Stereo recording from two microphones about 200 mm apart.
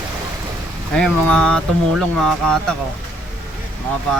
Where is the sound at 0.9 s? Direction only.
5° left (ahead or behind).